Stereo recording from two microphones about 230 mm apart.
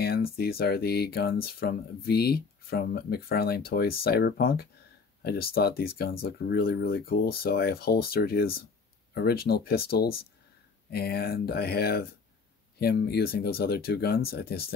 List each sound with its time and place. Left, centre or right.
0.0 s speech: left